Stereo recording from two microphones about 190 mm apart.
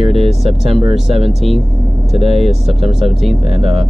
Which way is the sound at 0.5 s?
30° right (ahead or behind).